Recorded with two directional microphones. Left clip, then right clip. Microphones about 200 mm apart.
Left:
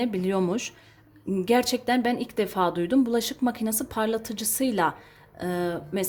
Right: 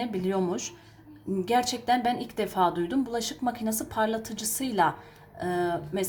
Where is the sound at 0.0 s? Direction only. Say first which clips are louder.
Left 3 dB; 35° left (ahead or behind).